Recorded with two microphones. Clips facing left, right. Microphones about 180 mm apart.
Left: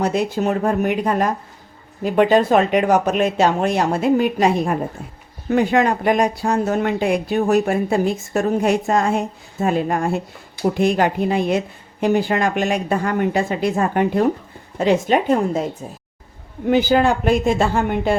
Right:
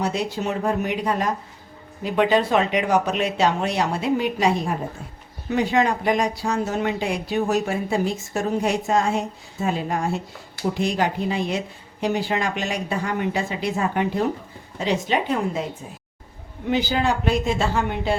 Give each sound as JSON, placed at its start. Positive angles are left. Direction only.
{"t": 0.0, "sound": "a woman's voice", "side_deg": 55}
{"t": 16.6, "sound": "a woman's voice", "side_deg": 50}